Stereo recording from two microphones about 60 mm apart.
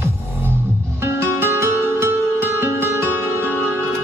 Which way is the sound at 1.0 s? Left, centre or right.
Right.